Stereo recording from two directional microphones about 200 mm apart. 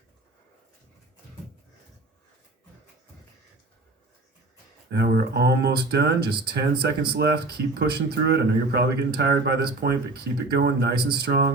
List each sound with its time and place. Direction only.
4.9 s a man's voice: 55° right (ahead or behind)